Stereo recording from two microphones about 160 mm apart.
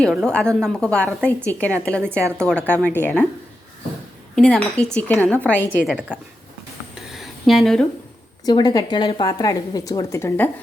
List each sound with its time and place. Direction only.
0.0 s a woman's voice: 5° left (ahead or behind)
4.4 s a woman's voice: 5° left (ahead or behind)
5.8 s a woman's voice: 5° right (ahead or behind)
7.1 s a sound: centre (ahead or behind)
8.4 s a woman's voice: 25° left (ahead or behind)